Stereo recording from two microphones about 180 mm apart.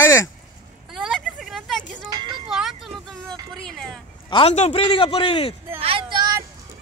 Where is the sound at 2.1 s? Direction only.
25° right (ahead or behind).